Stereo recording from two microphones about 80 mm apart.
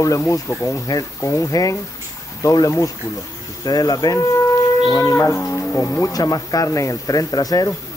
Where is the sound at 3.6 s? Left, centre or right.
Left.